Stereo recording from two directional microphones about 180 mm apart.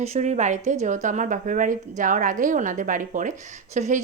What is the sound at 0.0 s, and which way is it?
A woman's voice, 40° right (ahead or behind).